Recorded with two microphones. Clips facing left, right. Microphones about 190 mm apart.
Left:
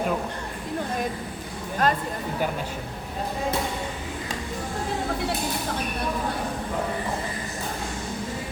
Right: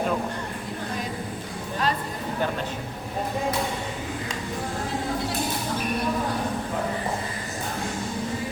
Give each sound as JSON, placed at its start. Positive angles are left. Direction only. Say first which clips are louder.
{"t": 1.8, "sound": "music", "louder": "left 3 dB", "side_deg": 50}